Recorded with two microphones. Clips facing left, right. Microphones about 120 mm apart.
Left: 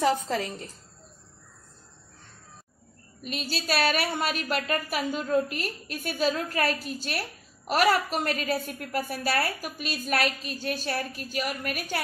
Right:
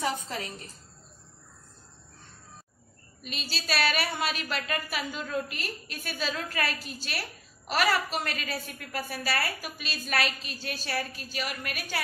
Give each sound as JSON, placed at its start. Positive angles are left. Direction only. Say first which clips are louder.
{"t": 3.2, "sound": "a woman's voice", "louder": "left 5 dB", "side_deg": 50}